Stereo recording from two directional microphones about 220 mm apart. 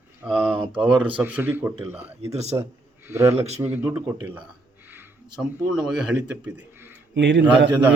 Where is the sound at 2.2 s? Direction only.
30° right (ahead or behind).